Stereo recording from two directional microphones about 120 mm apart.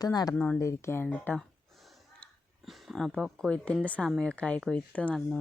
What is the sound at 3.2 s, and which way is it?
A woman's voice, 5° left (ahead or behind).